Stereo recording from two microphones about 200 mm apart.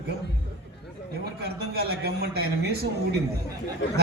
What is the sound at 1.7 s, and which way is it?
Speech, 50° right (ahead or behind).